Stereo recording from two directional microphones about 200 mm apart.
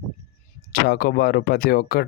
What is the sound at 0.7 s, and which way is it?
Speech, 50° left (ahead or behind).